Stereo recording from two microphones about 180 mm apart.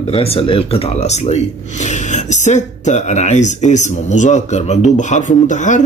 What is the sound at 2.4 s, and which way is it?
Speech, 40° left (ahead or behind).